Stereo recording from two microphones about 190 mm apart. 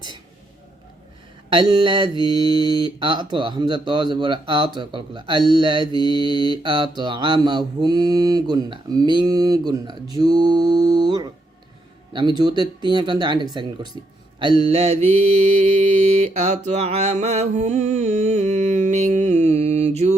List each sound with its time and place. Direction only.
1.5 s mantra: 25° right (ahead or behind)